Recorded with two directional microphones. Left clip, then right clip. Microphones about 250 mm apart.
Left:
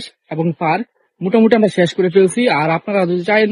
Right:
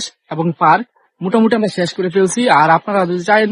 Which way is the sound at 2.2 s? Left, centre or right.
Centre.